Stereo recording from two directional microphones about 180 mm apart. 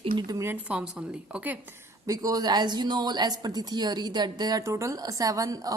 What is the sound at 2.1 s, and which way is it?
A woman's voice, 20° right (ahead or behind).